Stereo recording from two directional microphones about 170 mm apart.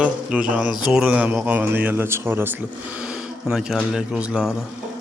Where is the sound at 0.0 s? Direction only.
5° right (ahead or behind).